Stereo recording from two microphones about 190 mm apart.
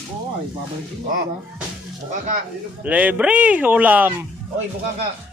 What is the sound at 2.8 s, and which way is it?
Speech, 5° right (ahead or behind).